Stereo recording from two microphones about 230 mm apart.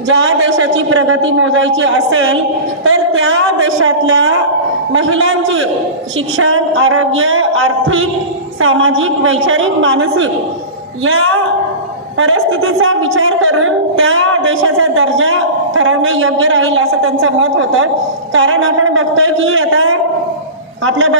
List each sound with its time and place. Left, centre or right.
0.1 s a woman's voice: right